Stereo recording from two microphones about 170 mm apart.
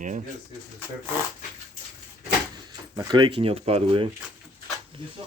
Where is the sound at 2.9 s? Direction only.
25° right (ahead or behind).